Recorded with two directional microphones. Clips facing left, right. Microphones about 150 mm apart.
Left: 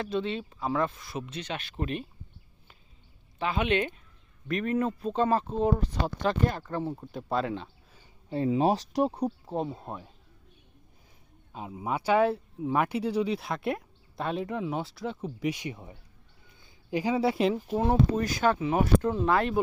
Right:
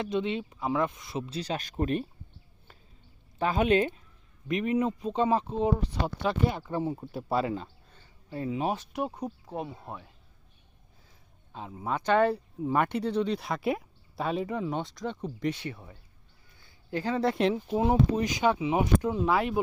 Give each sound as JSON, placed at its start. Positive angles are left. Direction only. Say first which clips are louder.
{"t": 0.0, "sound": "speech", "louder": "right 1 dB", "side_deg": -20}
{"t": 3.3, "sound": "speech", "louder": "right 3 dB", "side_deg": -40}
{"t": 4.4, "sound": "speech", "louder": "right 1 dB", "side_deg": -15}
{"t": 5.5, "sound": "speech", "louder": "left 1 dB", "side_deg": 0}
{"t": 5.9, "sound": "speech", "louder": "left 1 dB", "side_deg": -10}
{"t": 8.3, "sound": "speech", "louder": "left 5 dB", "side_deg": 30}
{"t": 11.5, "sound": "speech", "louder": "left 1 dB", "side_deg": 10}
{"t": 17.7, "sound": "speech", "louder": "right 1 dB", "side_deg": -15}